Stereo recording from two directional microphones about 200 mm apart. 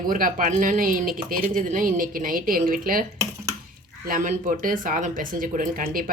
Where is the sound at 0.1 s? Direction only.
45° right (ahead or behind).